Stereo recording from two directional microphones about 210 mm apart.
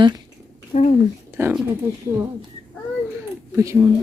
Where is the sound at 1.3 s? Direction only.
10° right (ahead or behind).